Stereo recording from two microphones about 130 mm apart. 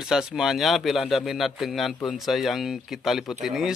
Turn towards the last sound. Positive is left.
turn(degrees=0)  # may be behind; listen again after turning